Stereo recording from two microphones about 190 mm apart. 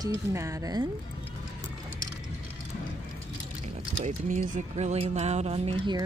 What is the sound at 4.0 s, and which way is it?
Speech, 40° right (ahead or behind).